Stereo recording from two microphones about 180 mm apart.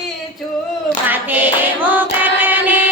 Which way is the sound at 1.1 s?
10° right (ahead or behind).